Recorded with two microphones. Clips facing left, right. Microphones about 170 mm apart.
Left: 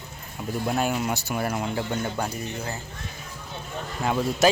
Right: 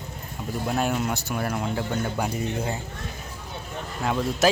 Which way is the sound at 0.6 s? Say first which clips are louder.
Even; centre (ahead or behind).